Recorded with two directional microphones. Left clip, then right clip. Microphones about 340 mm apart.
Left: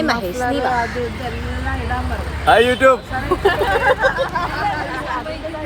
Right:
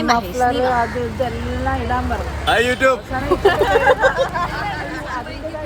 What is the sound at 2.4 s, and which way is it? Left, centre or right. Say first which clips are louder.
Speech: left 4 dB; centre.